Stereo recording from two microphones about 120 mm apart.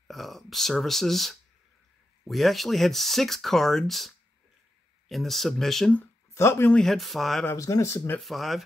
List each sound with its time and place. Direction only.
0.1 s speech: centre (ahead or behind)
5.9 s speech: 20° left (ahead or behind)
6.7 s speech: centre (ahead or behind)
7.4 s speech: 25° left (ahead or behind)
8.2 s speech: centre (ahead or behind)